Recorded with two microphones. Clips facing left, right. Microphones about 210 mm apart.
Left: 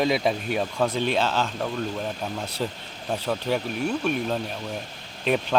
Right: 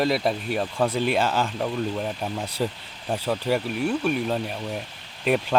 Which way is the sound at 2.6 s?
5° right (ahead or behind).